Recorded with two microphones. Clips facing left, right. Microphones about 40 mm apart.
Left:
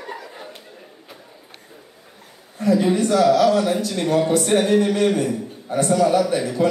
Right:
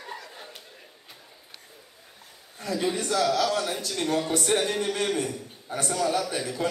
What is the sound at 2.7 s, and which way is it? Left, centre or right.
A man's voice, left.